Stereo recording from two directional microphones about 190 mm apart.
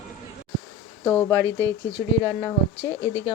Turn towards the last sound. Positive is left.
turn(degrees=-15)  # may be behind; listen again after turning